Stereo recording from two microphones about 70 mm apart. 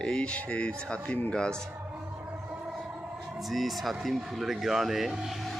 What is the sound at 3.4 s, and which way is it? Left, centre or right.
Speech, centre.